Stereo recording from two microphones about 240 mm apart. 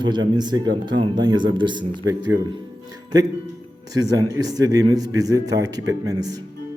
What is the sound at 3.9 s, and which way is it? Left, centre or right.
A man's voice, centre.